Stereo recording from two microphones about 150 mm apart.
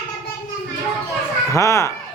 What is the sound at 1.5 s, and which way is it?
Speech, 20° left (ahead or behind).